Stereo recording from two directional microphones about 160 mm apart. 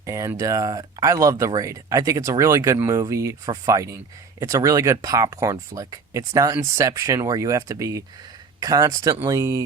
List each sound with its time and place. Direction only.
0.0 s speech: 20° right (ahead or behind)